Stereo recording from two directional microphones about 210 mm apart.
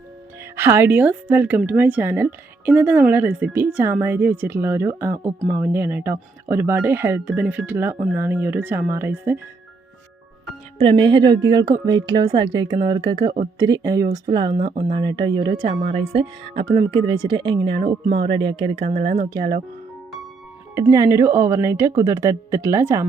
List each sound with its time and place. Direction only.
0.5 s a woman's voice: 10° right (ahead or behind)
10.8 s speech: 25° right (ahead or behind)
20.7 s a woman's voice: 15° right (ahead or behind)